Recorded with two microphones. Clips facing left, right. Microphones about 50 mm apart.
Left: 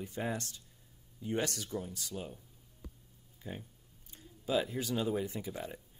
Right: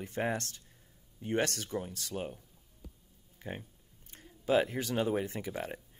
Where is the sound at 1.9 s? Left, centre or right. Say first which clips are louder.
Right 4 dB; right.